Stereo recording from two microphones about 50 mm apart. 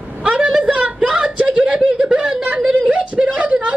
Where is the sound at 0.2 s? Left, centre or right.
Right.